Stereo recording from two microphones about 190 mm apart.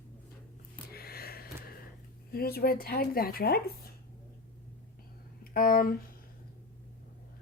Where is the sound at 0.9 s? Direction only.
55° left (ahead or behind).